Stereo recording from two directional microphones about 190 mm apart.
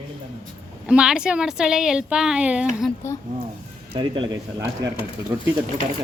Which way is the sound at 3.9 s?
25° right (ahead or behind).